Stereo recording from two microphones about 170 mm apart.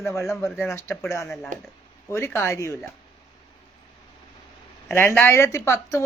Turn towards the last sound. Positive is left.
turn(degrees=15)  # may be behind; listen again after turning